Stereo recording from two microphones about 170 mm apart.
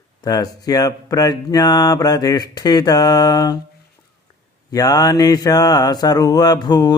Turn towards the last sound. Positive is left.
turn(degrees=25)  # may be behind; listen again after turning